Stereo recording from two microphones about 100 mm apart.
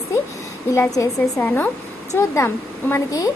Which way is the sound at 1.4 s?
20° left (ahead or behind).